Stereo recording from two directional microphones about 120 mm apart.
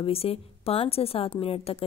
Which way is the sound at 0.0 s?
55° left (ahead or behind).